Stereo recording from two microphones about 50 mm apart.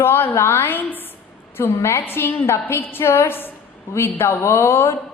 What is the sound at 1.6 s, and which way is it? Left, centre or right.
A woman's voice, left.